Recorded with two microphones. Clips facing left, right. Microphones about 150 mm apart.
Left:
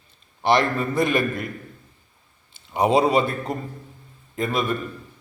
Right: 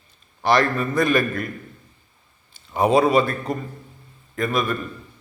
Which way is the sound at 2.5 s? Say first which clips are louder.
Right 1 dB; 20° left (ahead or behind).